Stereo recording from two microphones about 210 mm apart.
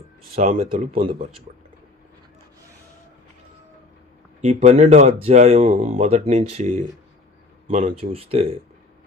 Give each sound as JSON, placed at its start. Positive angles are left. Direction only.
{"t": 0.3, "sound": "speech", "side_deg": -30}
{"t": 4.4, "sound": "speech", "side_deg": -30}